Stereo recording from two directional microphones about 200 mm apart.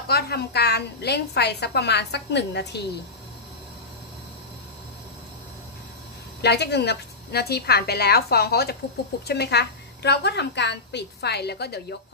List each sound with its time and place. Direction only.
0.1 s a woman's voice: 55° left (ahead or behind)
6.4 s a woman's voice: 55° left (ahead or behind)